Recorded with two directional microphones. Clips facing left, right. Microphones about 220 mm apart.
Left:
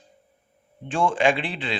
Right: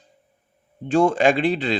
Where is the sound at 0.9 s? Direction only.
40° right (ahead or behind).